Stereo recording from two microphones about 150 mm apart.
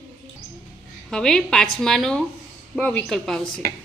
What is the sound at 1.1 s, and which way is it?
A woman's voice, 5° left (ahead or behind).